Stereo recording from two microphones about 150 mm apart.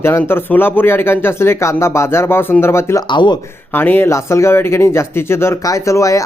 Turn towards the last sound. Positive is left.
turn(degrees=20)  # may be behind; listen again after turning